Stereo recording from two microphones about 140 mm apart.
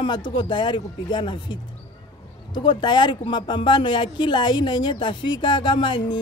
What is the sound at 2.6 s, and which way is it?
Speech, 35° left (ahead or behind).